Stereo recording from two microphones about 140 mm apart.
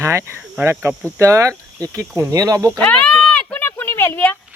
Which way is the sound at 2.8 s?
10° left (ahead or behind).